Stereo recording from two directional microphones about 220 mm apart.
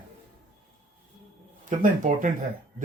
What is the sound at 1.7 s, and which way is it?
Speech, 35° right (ahead or behind).